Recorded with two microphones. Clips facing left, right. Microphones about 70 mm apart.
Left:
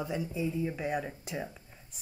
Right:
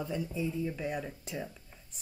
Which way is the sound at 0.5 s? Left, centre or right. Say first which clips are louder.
Left 2 dB; left.